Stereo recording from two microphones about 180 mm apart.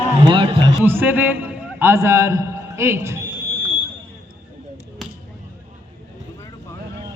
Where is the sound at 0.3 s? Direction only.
25° right (ahead or behind).